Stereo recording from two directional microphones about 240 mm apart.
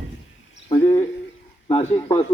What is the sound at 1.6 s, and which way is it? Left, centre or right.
Speech, left.